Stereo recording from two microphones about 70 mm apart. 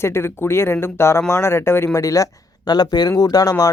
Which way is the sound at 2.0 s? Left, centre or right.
Left.